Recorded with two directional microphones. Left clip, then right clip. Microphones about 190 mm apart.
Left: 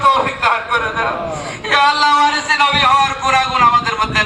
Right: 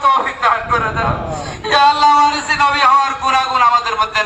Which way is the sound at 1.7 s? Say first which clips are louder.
Right 2 dB; 25° left (ahead or behind).